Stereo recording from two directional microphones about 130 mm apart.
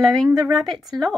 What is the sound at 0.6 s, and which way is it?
Speech, centre (ahead or behind).